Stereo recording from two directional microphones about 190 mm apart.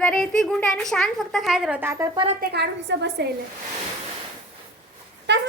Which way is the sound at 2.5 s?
60° right (ahead or behind).